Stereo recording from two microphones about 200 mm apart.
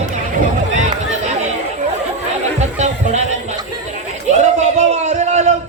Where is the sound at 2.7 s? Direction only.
35° right (ahead or behind).